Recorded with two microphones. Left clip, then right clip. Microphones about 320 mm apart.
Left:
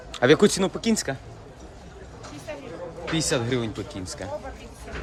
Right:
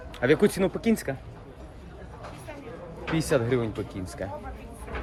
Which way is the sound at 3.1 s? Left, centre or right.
Centre.